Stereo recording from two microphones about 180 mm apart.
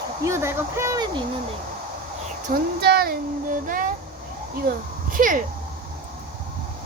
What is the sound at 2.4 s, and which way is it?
A child's voice, 55° right (ahead or behind).